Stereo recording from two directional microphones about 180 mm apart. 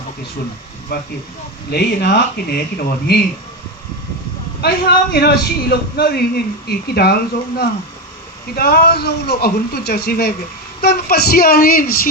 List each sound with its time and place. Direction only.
1.7 s a man's voice: 65° left (ahead or behind)
4.6 s a man's voice: 60° left (ahead or behind)
8.5 s a man's voice: 60° left (ahead or behind)